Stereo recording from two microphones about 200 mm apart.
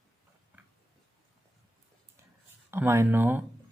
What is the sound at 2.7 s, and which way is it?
Speech, 10° right (ahead or behind).